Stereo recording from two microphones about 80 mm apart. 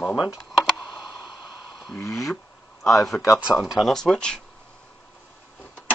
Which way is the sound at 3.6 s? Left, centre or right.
Centre.